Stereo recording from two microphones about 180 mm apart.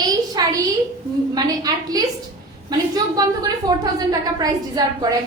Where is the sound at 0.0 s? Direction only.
20° right (ahead or behind).